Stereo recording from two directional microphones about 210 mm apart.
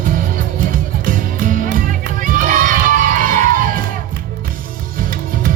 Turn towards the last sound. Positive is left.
turn(degrees=-40)  # may be behind; listen again after turning